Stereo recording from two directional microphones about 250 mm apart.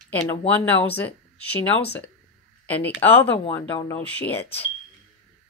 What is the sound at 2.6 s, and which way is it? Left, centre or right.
Speech, centre.